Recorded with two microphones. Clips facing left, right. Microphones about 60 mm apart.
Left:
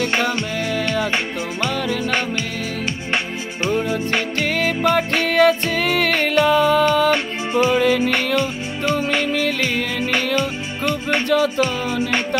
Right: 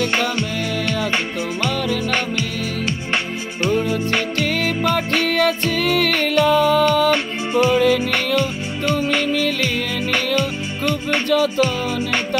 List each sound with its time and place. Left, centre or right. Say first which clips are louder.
0.0 s music: even; centre
3.6 s music: right 1 dB; centre
6.7 s music: even; left
10.9 s music: even; centre